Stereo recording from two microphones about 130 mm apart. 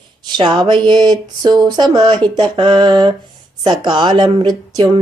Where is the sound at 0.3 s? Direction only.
35° right (ahead or behind).